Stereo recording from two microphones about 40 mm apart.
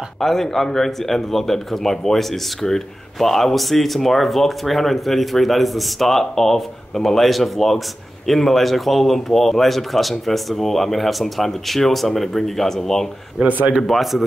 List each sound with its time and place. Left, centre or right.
0.2 s speech: centre
13.5 s speech: right
13.8 s speech: centre